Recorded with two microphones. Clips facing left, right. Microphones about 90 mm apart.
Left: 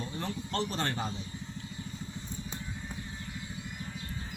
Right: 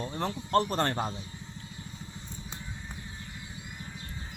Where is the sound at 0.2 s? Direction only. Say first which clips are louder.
Right 8 dB; 55° right (ahead or behind).